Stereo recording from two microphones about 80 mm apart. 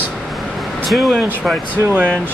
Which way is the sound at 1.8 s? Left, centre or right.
Right.